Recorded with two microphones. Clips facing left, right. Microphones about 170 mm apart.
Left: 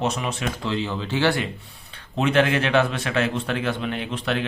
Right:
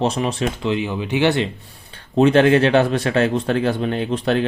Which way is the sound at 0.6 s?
15° right (ahead or behind).